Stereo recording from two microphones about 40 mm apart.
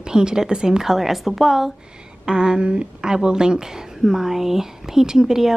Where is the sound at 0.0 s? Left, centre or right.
Centre.